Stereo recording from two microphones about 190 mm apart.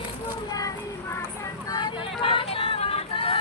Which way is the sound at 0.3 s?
20° left (ahead or behind).